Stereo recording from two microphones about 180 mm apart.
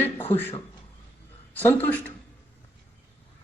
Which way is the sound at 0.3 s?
10° left (ahead or behind).